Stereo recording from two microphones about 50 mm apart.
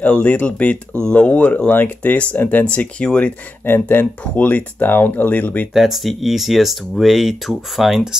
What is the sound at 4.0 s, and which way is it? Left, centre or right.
Speech, left.